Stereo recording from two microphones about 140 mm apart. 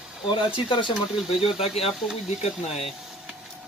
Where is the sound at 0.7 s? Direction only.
35° left (ahead or behind).